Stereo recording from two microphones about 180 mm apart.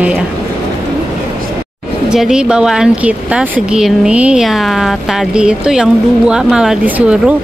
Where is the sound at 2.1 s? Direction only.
5° right (ahead or behind).